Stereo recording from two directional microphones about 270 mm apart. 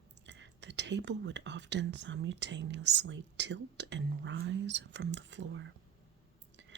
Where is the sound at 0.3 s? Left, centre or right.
Right.